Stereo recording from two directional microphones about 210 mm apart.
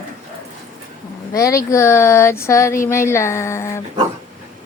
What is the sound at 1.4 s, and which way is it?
Speech, 15° left (ahead or behind).